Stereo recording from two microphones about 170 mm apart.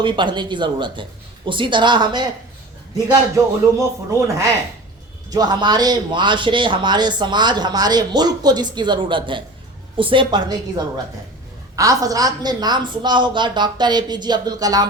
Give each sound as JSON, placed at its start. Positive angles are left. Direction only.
{"t": 0.0, "sound": "a man's voice", "side_deg": -30}
{"t": 5.3, "sound": "a man's voice", "side_deg": -25}